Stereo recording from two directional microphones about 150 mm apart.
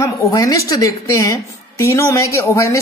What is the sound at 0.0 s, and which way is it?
Speech, 20° left (ahead or behind).